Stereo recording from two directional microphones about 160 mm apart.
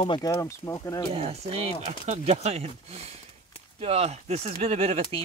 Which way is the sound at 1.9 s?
50° right (ahead or behind).